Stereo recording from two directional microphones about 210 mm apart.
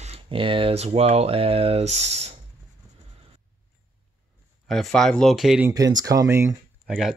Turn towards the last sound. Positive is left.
turn(degrees=0)  # may be behind; listen again after turning